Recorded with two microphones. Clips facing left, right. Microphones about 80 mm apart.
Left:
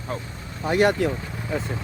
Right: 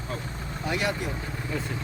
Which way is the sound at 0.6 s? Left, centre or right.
Left.